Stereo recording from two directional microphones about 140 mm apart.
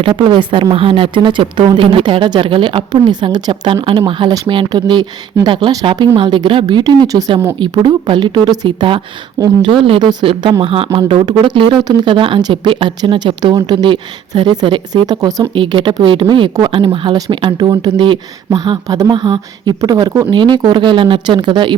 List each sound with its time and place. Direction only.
0.0 s speech: 35° right (ahead or behind)